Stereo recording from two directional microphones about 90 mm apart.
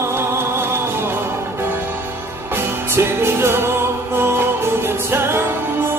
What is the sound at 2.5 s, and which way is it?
Music, 30° right (ahead or behind).